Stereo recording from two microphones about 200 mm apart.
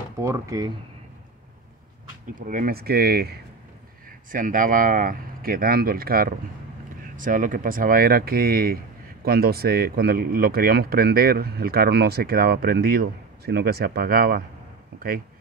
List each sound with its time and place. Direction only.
0.2 s speech: 15° right (ahead or behind)
2.3 s speech: 45° right (ahead or behind)